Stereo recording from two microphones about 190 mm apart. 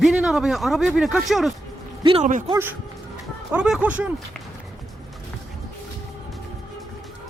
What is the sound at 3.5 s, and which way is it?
Speech, 5° right (ahead or behind).